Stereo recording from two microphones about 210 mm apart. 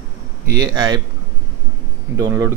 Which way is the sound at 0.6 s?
20° right (ahead or behind).